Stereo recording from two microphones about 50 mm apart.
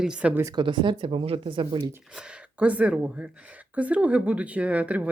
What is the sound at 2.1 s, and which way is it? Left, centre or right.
Speech, right.